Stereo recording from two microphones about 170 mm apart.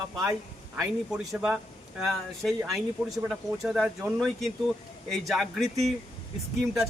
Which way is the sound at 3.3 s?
Centre (ahead or behind).